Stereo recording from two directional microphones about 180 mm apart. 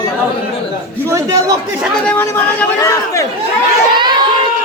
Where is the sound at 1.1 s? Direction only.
15° right (ahead or behind).